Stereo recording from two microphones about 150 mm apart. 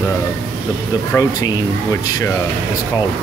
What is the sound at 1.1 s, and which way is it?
Speech, 25° left (ahead or behind).